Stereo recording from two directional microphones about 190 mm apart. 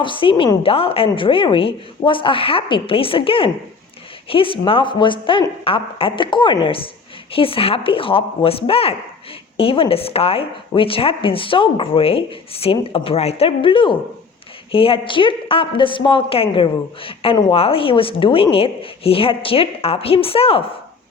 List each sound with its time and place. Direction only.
0.0 s a woman's voice: 25° left (ahead or behind)